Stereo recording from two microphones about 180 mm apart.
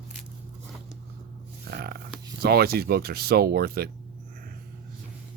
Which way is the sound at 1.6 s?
60° right (ahead or behind).